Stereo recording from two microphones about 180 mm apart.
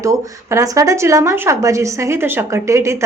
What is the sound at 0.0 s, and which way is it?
Speech, 15° right (ahead or behind).